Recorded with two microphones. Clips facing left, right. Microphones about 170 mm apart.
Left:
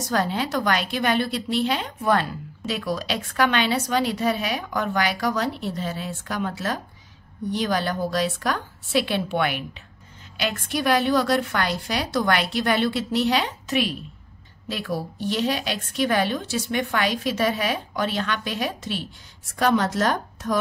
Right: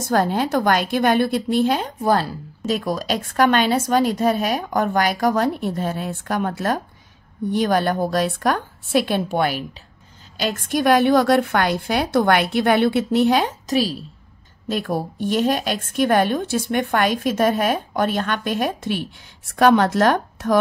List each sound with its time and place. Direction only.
0.0 s a woman's voice: 50° right (ahead or behind)
10.7 s a woman's voice: 50° right (ahead or behind)
14.7 s a woman's voice: 50° right (ahead or behind)